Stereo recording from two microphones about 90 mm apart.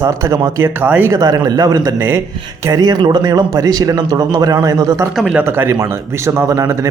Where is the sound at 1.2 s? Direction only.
45° right (ahead or behind).